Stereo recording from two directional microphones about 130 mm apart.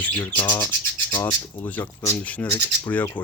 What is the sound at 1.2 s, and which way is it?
Speech, 15° left (ahead or behind).